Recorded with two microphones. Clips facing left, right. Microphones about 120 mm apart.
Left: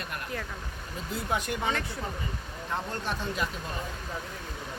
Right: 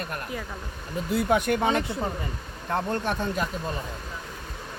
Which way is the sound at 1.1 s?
60° right (ahead or behind).